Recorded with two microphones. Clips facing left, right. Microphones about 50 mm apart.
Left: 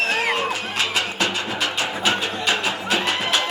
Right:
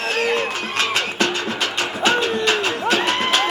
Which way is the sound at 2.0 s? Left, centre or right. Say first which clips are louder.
Right 6 dB; right.